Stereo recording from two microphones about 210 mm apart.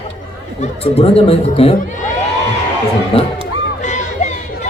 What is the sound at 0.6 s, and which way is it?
Speech, 30° left (ahead or behind).